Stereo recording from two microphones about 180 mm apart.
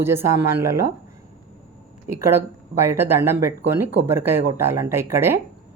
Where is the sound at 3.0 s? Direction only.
15° right (ahead or behind).